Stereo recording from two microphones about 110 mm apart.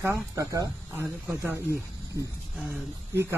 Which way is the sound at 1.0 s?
15° right (ahead or behind).